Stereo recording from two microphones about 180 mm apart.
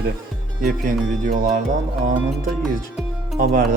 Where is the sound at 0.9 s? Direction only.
50° right (ahead or behind).